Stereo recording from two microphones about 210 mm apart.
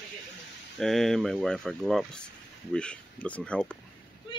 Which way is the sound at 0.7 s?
Centre (ahead or behind).